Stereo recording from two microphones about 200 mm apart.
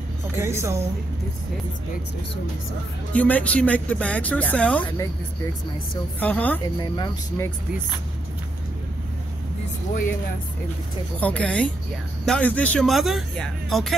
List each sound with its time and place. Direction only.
0.4 s a woman's voice: 15° right (ahead or behind)
3.1 s speech: 5° left (ahead or behind)
6.1 s speech: 5° left (ahead or behind)
6.8 s speech: 20° left (ahead or behind)
11.1 s speech: 5° left (ahead or behind)